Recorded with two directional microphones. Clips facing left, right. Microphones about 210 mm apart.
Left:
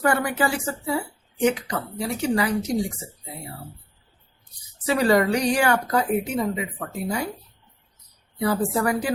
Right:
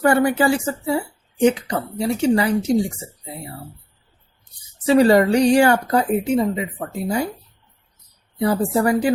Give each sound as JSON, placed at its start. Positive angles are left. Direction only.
{"t": 0.0, "sound": "speech", "side_deg": -30}
{"t": 4.9, "sound": "speech", "side_deg": -30}
{"t": 8.4, "sound": "speech", "side_deg": -30}